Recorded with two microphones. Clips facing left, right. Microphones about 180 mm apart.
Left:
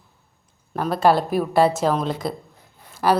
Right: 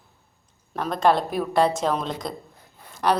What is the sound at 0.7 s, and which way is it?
A woman's voice, 5° left (ahead or behind).